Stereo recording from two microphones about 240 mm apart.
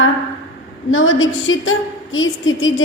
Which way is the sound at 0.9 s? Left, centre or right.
Left.